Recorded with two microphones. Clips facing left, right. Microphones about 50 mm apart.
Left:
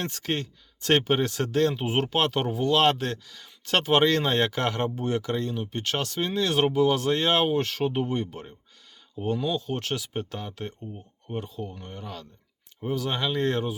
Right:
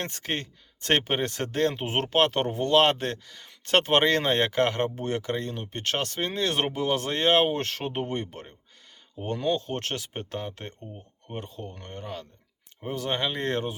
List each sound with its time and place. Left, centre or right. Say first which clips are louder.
0.2 s speech: left 2 dB; right
2.7 s speech: right 2 dB; right
10.2 s speech: left 1 dB; right
11.3 s speech: left 3 dB; right
12.0 s speech: right 2 dB; right